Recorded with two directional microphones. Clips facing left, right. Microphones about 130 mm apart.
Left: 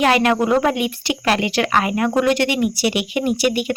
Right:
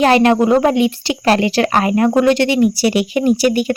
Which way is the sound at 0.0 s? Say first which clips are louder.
Right 5 dB; 30° right (ahead or behind).